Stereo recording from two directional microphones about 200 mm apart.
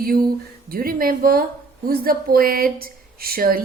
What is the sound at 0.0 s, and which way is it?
A woman's voice, 45° right (ahead or behind).